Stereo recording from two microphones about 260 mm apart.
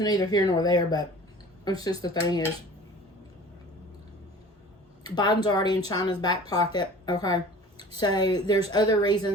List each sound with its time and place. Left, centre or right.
0.0 s speech: centre
5.0 s speech: centre